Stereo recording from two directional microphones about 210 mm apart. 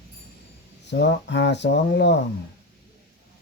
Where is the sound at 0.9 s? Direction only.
55° left (ahead or behind).